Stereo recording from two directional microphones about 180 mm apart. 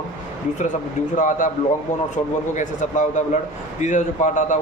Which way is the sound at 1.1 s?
45° left (ahead or behind).